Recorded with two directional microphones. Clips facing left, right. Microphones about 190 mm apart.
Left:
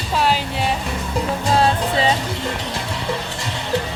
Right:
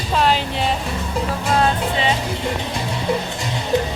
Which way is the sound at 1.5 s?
35° left (ahead or behind).